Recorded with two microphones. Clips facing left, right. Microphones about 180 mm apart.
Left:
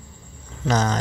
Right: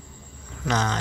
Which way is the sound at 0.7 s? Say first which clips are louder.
Left 4 dB; 40° left (ahead or behind).